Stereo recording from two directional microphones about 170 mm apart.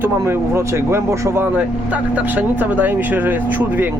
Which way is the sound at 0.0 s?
15° right (ahead or behind).